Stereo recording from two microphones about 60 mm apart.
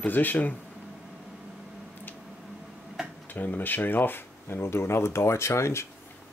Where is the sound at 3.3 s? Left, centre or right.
Left.